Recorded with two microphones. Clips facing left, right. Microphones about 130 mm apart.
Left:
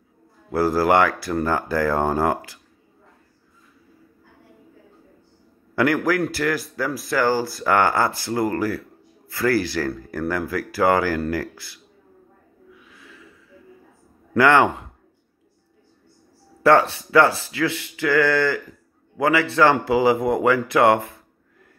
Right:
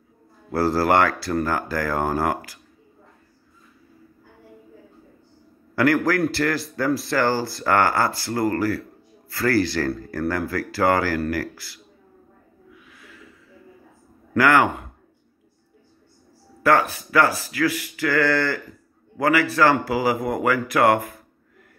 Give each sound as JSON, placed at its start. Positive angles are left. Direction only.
{"t": 0.5, "sound": "speech", "side_deg": 15}
{"t": 5.8, "sound": "speech", "side_deg": 15}
{"t": 14.3, "sound": "speech", "side_deg": 25}
{"t": 16.6, "sound": "speech", "side_deg": 25}